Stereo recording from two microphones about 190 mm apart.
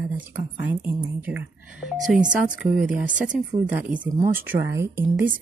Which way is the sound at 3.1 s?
5° right (ahead or behind).